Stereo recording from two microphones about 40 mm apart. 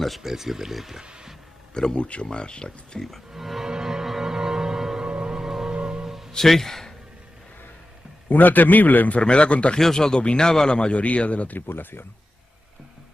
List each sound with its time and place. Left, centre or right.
0.2 s speech: centre
1.7 s speech: centre
2.0 s a man's voice: left
3.3 s music: centre
3.6 s music: centre
5.0 s music: right
5.4 s music: centre
5.7 s music: right
6.0 s music: centre
6.3 s a man's voice: centre
8.3 s a man's voice: left
9.2 s a man's voice: left
9.8 s a man's voice: centre; by 11.5 s left
11.5 s speech: left